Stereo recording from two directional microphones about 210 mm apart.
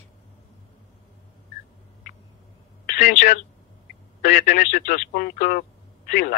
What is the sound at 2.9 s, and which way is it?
Speech, 40° left (ahead or behind).